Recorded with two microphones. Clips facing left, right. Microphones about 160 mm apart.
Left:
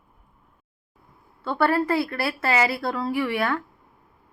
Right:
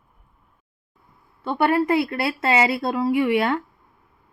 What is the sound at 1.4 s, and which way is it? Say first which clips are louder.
A woman's voice: right 2 dB; 20° right (ahead or behind).